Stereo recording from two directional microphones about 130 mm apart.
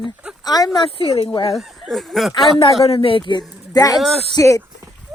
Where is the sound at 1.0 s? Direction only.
50° left (ahead or behind).